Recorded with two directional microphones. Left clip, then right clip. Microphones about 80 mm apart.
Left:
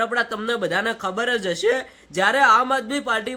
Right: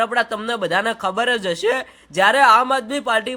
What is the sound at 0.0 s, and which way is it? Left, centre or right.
A man's voice, right.